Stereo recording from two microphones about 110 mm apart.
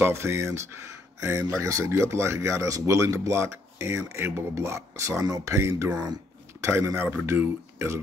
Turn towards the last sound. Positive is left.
turn(degrees=-25)  # may be behind; listen again after turning